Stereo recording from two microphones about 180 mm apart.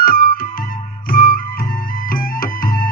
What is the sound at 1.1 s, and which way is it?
Music, 50° left (ahead or behind).